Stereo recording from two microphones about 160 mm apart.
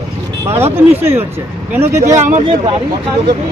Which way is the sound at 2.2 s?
50° right (ahead or behind).